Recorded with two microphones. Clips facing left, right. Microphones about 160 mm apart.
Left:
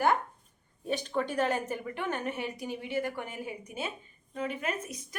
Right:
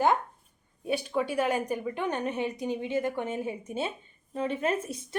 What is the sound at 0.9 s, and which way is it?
A woman's voice, 10° right (ahead or behind).